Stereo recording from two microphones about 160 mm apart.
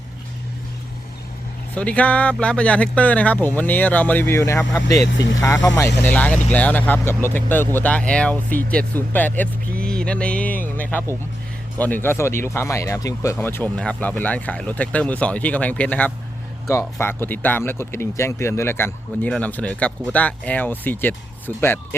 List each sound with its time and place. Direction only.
1.7 s speech: 10° left (ahead or behind)
12.0 s speech: 15° left (ahead or behind)